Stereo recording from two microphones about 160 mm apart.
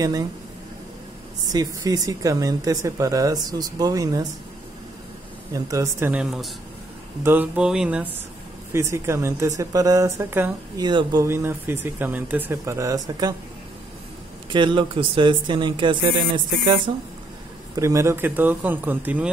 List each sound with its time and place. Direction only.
0.0 s speech: 25° right (ahead or behind)
1.5 s speech: 25° right (ahead or behind)
5.5 s speech: 20° right (ahead or behind)
8.7 s speech: 15° right (ahead or behind)
10.8 s speech: 25° right (ahead or behind)
14.5 s speech: 30° right (ahead or behind)
17.7 s speech: 20° right (ahead or behind)